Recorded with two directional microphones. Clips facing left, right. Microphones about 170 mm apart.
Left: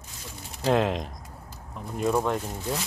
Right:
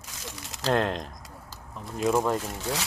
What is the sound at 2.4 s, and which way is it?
Speech, 85° right.